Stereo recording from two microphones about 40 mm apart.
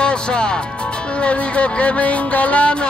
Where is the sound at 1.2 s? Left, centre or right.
Left.